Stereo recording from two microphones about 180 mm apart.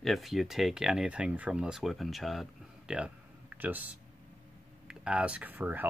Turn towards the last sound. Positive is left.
turn(degrees=-10)  # may be behind; listen again after turning